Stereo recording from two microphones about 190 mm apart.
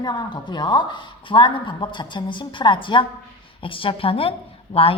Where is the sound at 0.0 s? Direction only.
20° left (ahead or behind).